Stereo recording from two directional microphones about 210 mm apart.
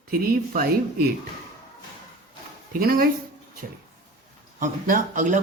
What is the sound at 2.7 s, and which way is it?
Speech, 45° right (ahead or behind).